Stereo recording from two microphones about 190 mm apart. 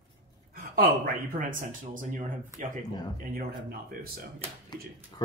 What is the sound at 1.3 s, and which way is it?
Speech, 45° right (ahead or behind).